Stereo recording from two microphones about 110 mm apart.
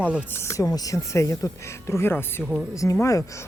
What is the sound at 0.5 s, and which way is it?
Speech, 30° left (ahead or behind).